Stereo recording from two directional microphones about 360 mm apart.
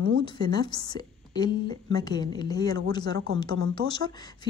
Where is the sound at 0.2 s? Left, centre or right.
Centre.